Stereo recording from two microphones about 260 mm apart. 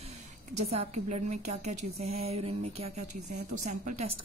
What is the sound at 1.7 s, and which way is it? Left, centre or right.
Speech, right.